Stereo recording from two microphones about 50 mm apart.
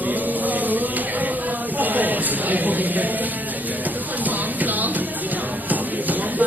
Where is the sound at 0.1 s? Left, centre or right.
Right.